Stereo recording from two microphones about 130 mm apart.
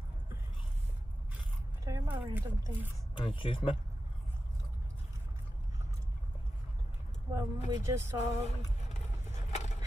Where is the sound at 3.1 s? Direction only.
45° left (ahead or behind).